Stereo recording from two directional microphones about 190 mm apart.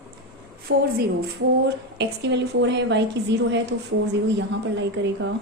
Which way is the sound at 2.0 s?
65° right (ahead or behind).